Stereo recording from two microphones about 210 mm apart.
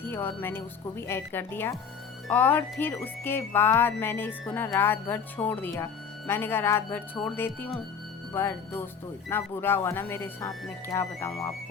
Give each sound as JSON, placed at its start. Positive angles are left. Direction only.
{"t": 0.0, "sound": "speech", "side_deg": 10}